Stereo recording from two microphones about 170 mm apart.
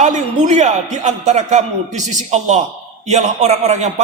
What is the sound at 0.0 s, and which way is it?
A man's voice, 45° right (ahead or behind).